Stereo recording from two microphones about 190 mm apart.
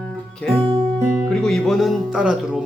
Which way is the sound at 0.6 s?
25° right (ahead or behind).